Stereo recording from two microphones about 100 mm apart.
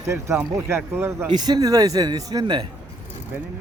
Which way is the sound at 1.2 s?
45° right (ahead or behind).